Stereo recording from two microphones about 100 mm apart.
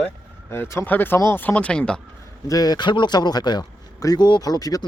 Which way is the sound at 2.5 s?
40° left (ahead or behind).